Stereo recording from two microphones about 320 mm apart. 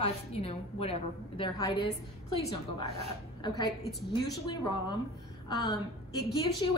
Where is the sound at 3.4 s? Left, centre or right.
Centre.